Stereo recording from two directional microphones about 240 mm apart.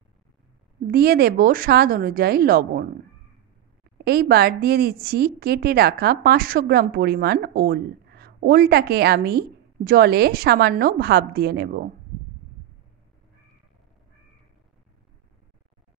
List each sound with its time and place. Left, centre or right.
0.9 s a woman's voice: right
4.0 s a woman's voice: right